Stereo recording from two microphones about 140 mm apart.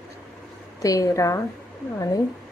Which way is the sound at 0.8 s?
25° left (ahead or behind).